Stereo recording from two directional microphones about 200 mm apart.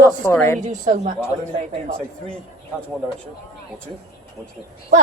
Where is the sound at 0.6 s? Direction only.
35° right (ahead or behind).